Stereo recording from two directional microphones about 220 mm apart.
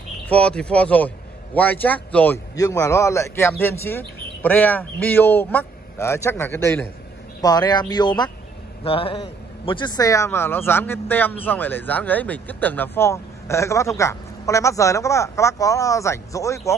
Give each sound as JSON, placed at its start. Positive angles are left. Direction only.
{"t": 0.3, "sound": "a man's voice", "side_deg": 5}